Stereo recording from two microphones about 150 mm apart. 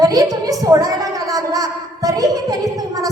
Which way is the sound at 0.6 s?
25° right (ahead or behind).